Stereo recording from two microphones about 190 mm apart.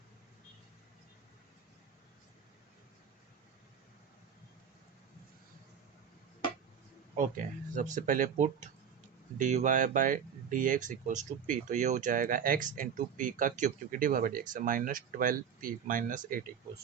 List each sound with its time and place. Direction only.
7.2 s speech: 40° right (ahead or behind)